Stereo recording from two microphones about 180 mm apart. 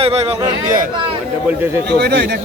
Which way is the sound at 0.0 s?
35° right (ahead or behind).